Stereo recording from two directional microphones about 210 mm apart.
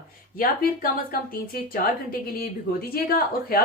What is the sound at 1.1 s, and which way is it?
Speech, 45° left (ahead or behind).